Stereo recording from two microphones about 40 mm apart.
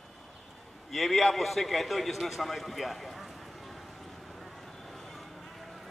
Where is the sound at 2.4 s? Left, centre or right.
Centre.